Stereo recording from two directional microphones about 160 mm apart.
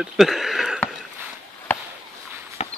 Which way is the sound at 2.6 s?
40° left (ahead or behind).